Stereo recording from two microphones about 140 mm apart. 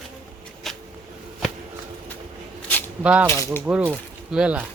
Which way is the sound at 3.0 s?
10° right (ahead or behind).